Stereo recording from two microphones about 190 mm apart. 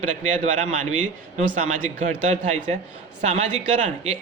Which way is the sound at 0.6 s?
35° right (ahead or behind).